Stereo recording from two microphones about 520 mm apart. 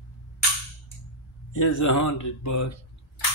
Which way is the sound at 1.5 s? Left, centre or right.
Left.